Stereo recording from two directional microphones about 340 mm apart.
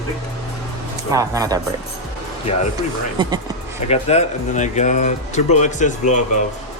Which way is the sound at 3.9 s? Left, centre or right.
Centre.